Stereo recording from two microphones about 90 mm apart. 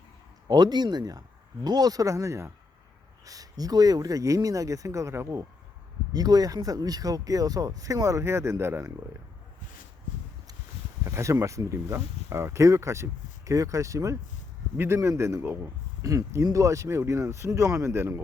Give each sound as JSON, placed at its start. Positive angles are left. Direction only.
{"t": 0.4, "sound": "speech", "side_deg": -50}
{"t": 6.1, "sound": "speech", "side_deg": -45}
{"t": 11.0, "sound": "speech", "side_deg": -30}